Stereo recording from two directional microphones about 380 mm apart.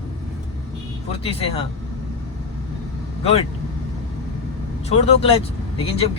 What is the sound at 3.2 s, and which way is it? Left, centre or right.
Speech, centre.